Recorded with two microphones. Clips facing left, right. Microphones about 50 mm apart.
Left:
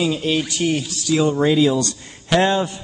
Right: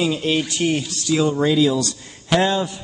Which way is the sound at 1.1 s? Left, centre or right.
Centre.